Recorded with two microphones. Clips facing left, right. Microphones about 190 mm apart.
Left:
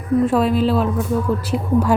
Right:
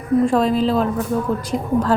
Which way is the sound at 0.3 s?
5° left (ahead or behind).